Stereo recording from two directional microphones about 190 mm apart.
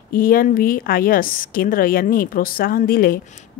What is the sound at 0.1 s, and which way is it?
Speech, 50° left (ahead or behind).